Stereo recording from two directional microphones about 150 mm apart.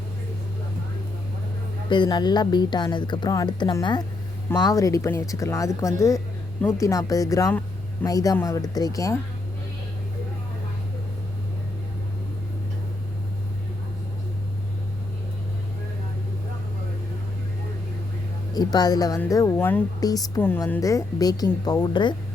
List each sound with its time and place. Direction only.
1.9 s speech: 30° left (ahead or behind)
18.5 s speech: 25° left (ahead or behind); by 19.8 s 10° left (ahead or behind)
20.0 s speech: 25° left (ahead or behind)
20.4 s speech: 15° left (ahead or behind); by 22.1 s 30° left (ahead or behind)